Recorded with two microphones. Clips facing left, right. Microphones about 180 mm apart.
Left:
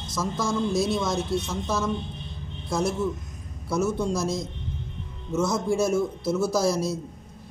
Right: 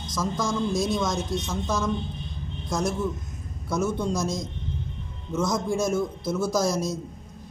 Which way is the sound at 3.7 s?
5° left (ahead or behind).